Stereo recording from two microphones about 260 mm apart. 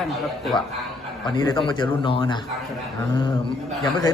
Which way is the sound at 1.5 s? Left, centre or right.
Centre.